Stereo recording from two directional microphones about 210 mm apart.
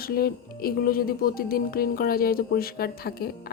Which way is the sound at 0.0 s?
45° left (ahead or behind).